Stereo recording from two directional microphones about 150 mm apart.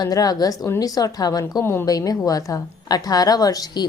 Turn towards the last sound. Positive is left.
turn(degrees=25)  # may be behind; listen again after turning